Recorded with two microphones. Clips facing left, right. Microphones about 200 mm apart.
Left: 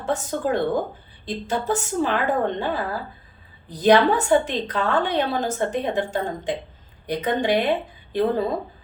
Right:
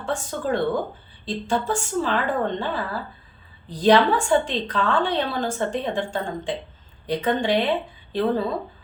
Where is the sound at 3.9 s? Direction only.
20° left (ahead or behind).